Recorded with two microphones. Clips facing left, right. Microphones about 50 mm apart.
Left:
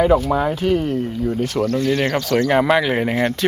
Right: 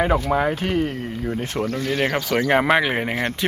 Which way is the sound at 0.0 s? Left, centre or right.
Right.